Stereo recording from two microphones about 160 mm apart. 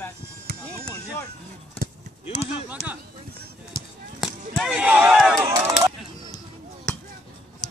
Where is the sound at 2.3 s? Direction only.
40° left (ahead or behind).